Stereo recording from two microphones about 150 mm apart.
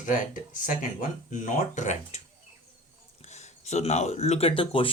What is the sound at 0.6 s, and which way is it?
Speech, 60° left (ahead or behind).